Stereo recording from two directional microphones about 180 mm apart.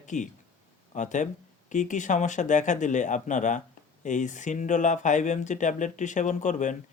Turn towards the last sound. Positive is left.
turn(degrees=45)  # may be behind; listen again after turning